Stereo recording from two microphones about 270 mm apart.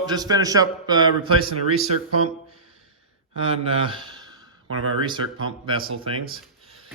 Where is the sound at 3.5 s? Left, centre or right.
Centre.